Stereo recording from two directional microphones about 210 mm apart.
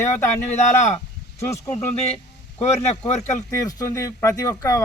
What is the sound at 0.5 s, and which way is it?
Speech, 35° left (ahead or behind).